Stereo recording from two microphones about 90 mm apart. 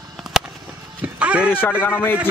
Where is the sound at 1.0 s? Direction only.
15° right (ahead or behind).